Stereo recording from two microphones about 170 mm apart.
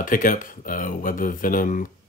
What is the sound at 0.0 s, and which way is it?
Speech, 50° left (ahead or behind).